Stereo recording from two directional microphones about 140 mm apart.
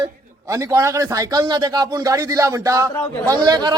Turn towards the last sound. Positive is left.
turn(degrees=-30)  # may be behind; listen again after turning